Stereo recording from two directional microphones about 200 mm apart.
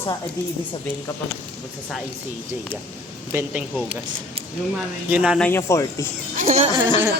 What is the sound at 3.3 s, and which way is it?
Speech, 10° right (ahead or behind).